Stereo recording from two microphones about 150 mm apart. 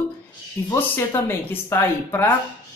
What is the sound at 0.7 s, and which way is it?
Speech, 15° left (ahead or behind).